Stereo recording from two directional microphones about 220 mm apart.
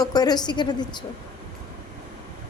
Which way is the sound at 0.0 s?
15° left (ahead or behind).